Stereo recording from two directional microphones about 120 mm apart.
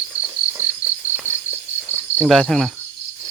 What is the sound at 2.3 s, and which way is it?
Speech, 5° left (ahead or behind).